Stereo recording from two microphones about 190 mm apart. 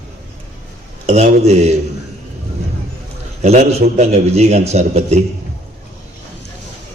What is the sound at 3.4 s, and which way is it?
A man's voice, 35° right (ahead or behind).